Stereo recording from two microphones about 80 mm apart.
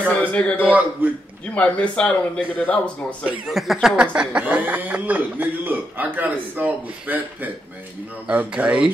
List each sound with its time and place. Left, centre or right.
0.2 s speech: centre
0.6 s speech: centre
1.5 s speech: centre
3.4 s a man's voice: centre